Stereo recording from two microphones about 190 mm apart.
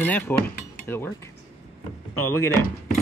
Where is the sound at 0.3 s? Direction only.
10° left (ahead or behind).